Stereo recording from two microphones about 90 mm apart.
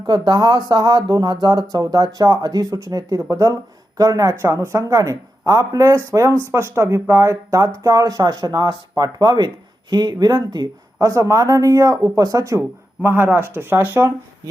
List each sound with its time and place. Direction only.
0.1 s speech: 50° right (ahead or behind)
11.0 s speech: 35° right (ahead or behind)